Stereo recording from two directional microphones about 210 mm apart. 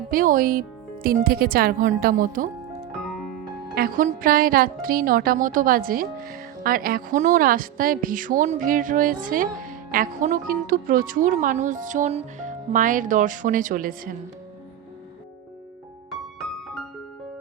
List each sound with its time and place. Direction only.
0.1 s a woman's voice: 40° right (ahead or behind)
3.0 s music: centre (ahead or behind)
3.8 s speech: 40° right (ahead or behind)